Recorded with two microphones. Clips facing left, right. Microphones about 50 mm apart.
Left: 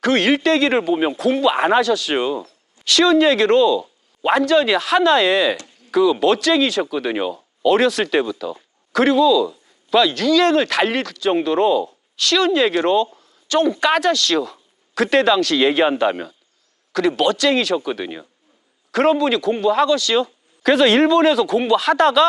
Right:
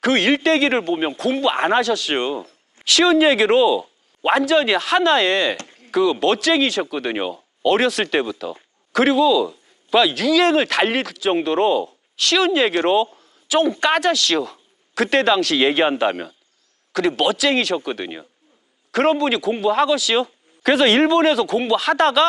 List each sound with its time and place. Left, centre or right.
0.0 s speech: centre
5.5 s a sound: right
5.9 s a man's voice: centre